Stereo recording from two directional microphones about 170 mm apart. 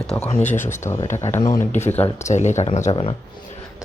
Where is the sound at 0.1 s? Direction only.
10° left (ahead or behind).